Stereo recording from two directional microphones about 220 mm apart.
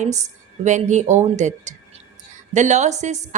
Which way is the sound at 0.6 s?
35° right (ahead or behind).